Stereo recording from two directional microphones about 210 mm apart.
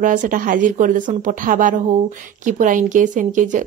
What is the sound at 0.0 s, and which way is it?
A woman's voice, 40° right (ahead or behind).